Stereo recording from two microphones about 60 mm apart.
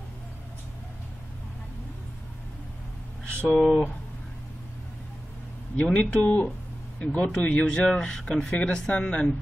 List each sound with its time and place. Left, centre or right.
3.3 s speech: centre
5.8 s speech: centre
7.6 s speech: centre